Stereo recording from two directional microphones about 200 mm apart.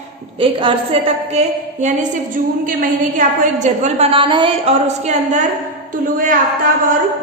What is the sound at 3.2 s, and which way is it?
A woman's voice, 35° right (ahead or behind).